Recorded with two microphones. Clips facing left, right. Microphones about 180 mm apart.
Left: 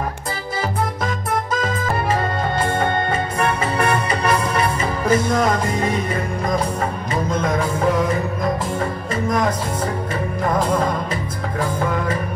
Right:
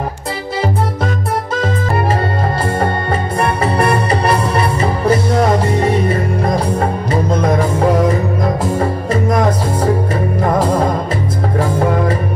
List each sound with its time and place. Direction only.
2.8 s music: 35° right (ahead or behind)